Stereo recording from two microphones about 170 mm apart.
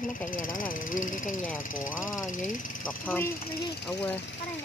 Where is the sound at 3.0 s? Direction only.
10° left (ahead or behind).